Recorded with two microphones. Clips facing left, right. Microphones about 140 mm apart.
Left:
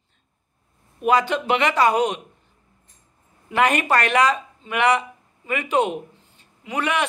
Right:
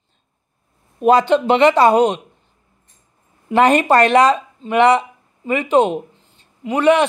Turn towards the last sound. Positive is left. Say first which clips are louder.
# right 10 dB
turn(degrees=-25)  # may be behind; listen again after turning